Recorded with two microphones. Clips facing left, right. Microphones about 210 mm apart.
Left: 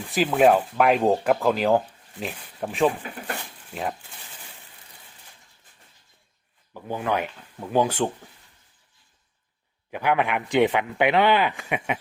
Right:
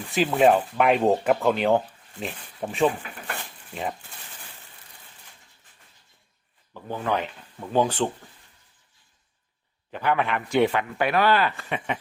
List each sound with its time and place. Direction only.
0.1 s speech: 5° left (ahead or behind)
6.8 s speech: 10° left (ahead or behind)
9.9 s speech: 15° left (ahead or behind)